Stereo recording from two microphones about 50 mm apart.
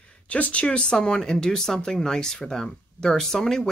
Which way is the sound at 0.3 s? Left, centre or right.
Left.